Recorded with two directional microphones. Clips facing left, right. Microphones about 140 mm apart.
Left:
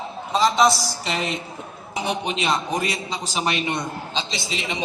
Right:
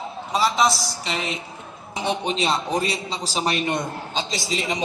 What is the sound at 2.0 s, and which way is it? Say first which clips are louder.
A man's voice: right 1 dB; 30° right (ahead or behind).